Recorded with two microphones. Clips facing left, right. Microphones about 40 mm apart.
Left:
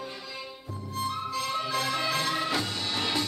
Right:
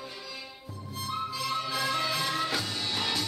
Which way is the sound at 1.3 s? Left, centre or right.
Centre.